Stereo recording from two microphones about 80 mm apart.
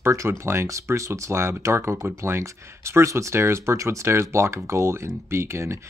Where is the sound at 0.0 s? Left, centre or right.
Right.